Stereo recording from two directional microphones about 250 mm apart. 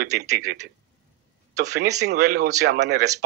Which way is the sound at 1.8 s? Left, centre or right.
Right.